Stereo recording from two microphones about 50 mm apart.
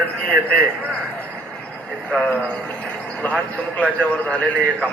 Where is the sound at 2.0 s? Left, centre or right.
Centre.